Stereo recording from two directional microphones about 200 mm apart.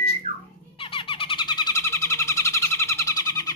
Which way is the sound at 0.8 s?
25° left (ahead or behind).